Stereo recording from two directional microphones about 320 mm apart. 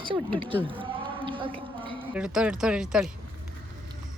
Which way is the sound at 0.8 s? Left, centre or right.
Centre.